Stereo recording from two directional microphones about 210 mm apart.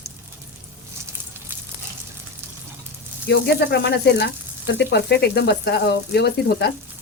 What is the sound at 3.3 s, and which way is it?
Speech, 55° left (ahead or behind).